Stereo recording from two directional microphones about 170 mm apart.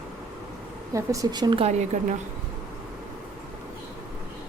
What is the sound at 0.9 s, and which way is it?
Speech, 20° right (ahead or behind).